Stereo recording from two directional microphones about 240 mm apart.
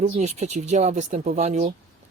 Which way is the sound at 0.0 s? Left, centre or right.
Right.